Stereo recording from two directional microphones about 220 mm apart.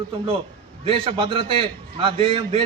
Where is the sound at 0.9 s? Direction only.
25° right (ahead or behind).